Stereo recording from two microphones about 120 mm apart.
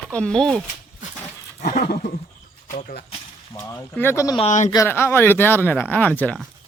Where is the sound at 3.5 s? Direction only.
20° left (ahead or behind).